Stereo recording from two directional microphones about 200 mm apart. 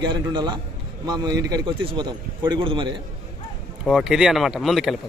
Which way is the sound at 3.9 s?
5° right (ahead or behind).